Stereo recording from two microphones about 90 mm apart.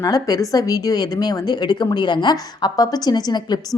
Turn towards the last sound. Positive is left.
turn(degrees=50)  # may be behind; listen again after turning